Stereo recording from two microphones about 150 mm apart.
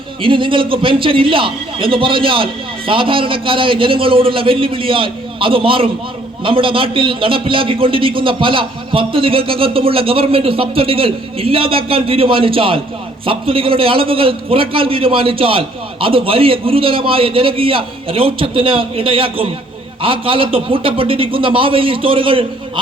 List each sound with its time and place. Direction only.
0.2 s a man's voice: 35° right (ahead or behind)